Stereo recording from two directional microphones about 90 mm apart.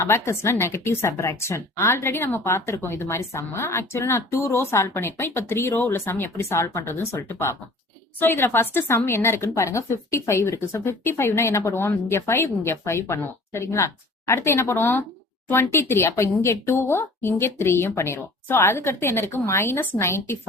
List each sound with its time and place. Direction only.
0.0 s a woman's voice: 30° left (ahead or behind)